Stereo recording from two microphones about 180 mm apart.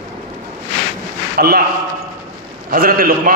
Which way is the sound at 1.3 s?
60° right (ahead or behind).